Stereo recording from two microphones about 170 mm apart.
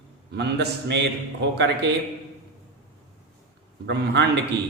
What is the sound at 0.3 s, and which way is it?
A man's voice, 85° right.